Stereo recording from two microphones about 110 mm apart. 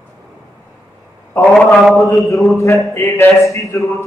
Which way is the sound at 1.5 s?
Centre (ahead or behind).